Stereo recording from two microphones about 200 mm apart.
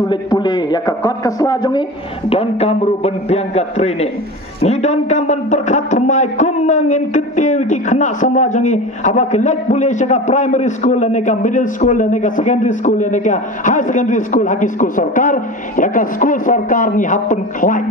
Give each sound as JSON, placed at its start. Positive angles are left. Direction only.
{"t": 0.1, "sound": "a man's voice", "side_deg": 20}